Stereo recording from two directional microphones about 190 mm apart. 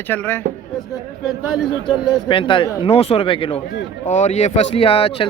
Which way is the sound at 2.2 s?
25° left (ahead or behind).